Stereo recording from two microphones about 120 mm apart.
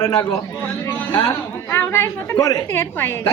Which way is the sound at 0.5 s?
15° left (ahead or behind).